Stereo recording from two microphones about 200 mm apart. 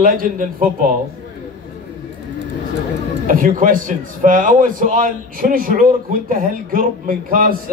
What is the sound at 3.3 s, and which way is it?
A man's voice, 45° right (ahead or behind).